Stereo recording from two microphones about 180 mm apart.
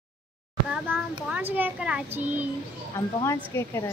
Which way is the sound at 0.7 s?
10° right (ahead or behind).